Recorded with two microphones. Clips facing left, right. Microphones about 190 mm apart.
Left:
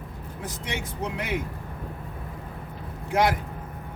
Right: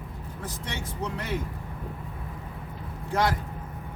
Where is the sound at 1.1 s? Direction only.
15° left (ahead or behind).